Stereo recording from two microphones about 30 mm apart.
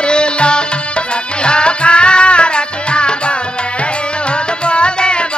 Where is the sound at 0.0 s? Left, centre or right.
Left.